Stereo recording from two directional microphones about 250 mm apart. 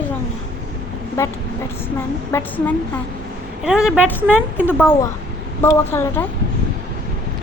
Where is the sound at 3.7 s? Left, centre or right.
Centre.